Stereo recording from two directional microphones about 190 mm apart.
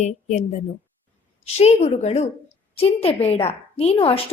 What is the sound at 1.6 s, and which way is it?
A woman's voice, 35° left (ahead or behind).